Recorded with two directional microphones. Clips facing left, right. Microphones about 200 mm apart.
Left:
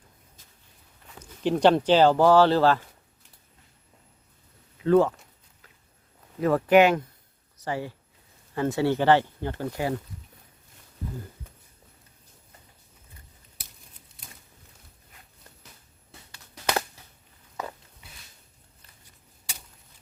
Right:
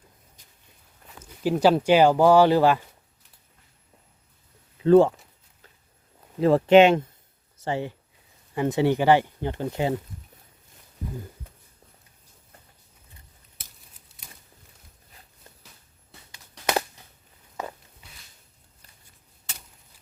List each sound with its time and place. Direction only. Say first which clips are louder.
1.2 s speech: even; 5° right (ahead or behind)
4.8 s speech: right 4 dB; 30° right (ahead or behind)
6.4 s speech: right 3 dB; 25° right (ahead or behind)